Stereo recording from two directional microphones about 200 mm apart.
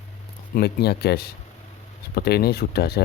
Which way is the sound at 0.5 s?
55° left (ahead or behind).